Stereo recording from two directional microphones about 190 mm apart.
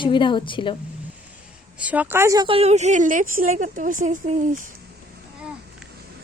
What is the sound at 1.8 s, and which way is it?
A woman's voice, 5° right (ahead or behind).